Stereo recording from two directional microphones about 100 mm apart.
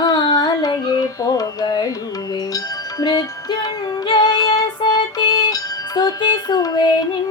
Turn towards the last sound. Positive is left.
turn(degrees=40)  # may be behind; listen again after turning